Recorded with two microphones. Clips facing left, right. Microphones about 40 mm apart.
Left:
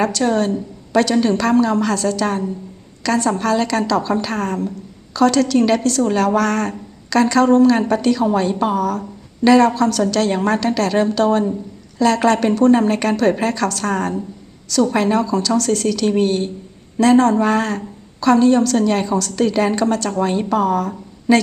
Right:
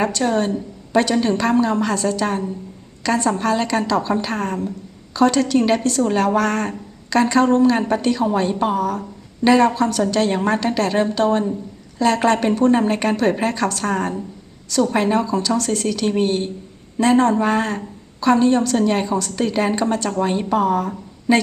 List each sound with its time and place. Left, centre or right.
0.0 s a woman's voice: right